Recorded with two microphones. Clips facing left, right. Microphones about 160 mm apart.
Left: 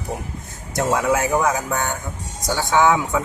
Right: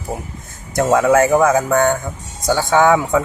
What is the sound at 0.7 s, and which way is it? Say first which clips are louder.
Speech: right 6 dB; 50° right (ahead or behind).